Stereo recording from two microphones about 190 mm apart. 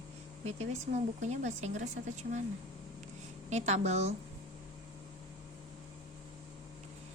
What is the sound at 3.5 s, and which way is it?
Speech, 35° right (ahead or behind).